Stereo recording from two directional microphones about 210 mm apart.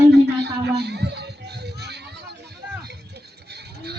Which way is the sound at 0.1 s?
50° right (ahead or behind).